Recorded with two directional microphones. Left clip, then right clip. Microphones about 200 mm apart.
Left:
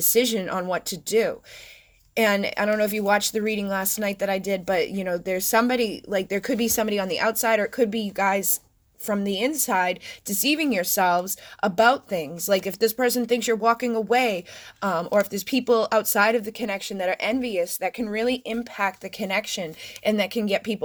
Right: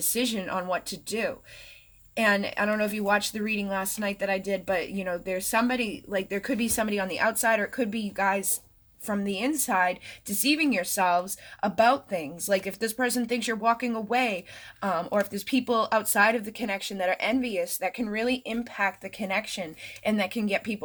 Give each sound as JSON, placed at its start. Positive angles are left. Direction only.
{"t": 0.1, "sound": "speech", "side_deg": 35}